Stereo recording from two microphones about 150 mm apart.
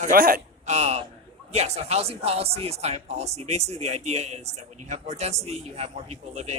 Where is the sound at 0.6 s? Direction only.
45° right (ahead or behind).